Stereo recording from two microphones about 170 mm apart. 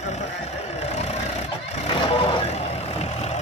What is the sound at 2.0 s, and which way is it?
Vehicle, 30° left (ahead or behind).